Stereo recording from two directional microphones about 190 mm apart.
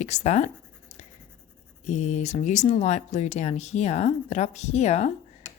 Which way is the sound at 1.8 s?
35° left (ahead or behind).